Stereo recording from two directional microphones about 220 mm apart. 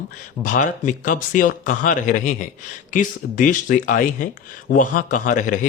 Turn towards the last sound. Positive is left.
turn(degrees=35)  # may be behind; listen again after turning